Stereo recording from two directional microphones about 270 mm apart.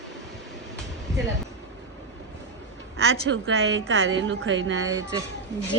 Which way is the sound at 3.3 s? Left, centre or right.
Right.